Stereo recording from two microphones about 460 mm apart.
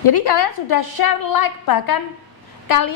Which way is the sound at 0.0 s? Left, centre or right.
Left.